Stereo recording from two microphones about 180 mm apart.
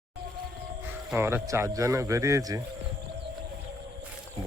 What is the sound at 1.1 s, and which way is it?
Speech, 15° right (ahead or behind).